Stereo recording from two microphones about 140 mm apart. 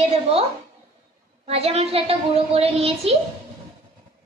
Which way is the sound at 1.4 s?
45° right (ahead or behind).